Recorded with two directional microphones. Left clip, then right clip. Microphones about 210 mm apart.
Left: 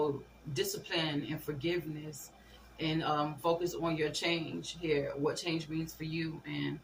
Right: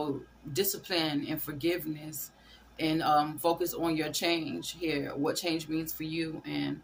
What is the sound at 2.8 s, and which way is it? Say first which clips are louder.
Speech: right 6 dB; 65° right (ahead or behind).